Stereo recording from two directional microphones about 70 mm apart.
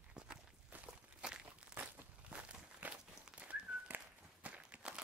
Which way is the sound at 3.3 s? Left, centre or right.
Centre.